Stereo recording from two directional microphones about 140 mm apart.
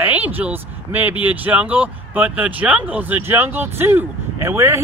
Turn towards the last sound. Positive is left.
turn(degrees=-20)  # may be behind; listen again after turning